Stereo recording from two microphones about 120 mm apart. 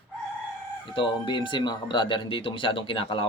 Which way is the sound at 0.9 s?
45° left (ahead or behind).